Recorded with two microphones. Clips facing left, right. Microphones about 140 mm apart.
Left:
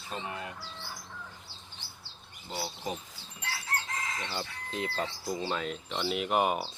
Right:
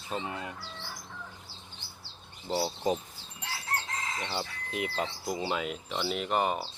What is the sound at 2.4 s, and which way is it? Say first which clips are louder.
Speech: right 7 dB; 35° right (ahead or behind).